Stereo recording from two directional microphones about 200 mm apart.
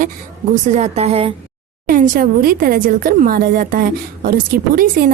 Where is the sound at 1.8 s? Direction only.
40° right (ahead or behind).